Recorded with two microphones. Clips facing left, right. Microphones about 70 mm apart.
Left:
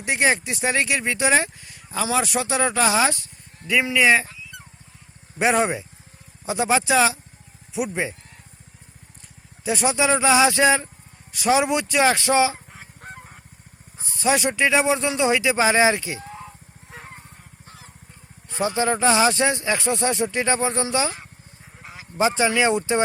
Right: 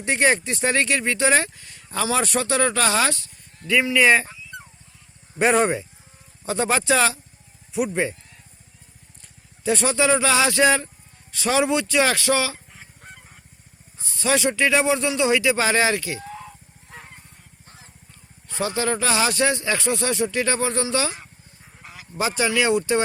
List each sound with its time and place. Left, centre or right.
0.0 s speech: centre
3.9 s speech: centre
5.4 s speech: centre
9.6 s speech: centre
12.8 s goose: left
14.0 s speech: left
18.4 s speech: left